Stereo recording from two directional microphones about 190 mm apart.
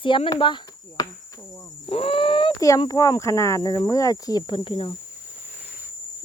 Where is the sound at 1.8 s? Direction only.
30° left (ahead or behind).